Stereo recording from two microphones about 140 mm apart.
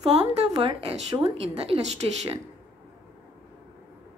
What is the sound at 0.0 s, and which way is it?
A woman's voice, 45° right (ahead or behind).